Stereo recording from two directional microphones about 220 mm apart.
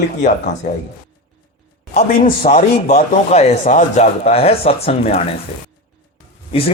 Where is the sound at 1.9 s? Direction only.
30° left (ahead or behind).